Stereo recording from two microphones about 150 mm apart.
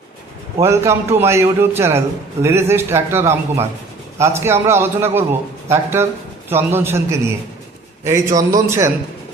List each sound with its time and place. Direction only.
0.6 s a man's voice: 20° right (ahead or behind)